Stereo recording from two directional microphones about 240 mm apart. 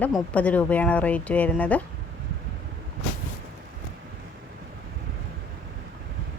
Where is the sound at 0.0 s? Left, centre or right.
Centre.